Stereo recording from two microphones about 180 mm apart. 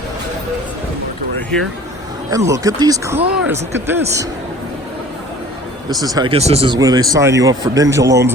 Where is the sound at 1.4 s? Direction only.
5° left (ahead or behind).